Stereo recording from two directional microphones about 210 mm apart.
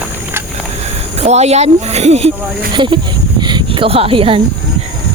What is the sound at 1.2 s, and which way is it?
Speech, 30° right (ahead or behind).